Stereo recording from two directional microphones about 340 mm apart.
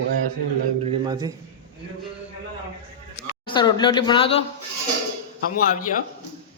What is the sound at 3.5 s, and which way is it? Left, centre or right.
Speech, centre.